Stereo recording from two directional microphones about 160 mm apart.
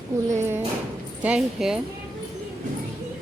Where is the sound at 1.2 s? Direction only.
5° right (ahead or behind).